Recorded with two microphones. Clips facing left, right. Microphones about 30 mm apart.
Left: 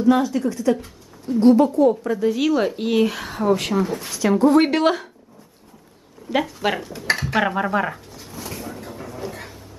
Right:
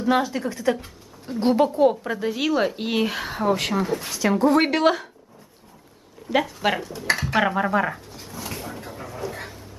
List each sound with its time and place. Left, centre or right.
0.0 s speech: centre
2.0 s speech: centre
6.3 s dishes: centre
8.5 s a sound: centre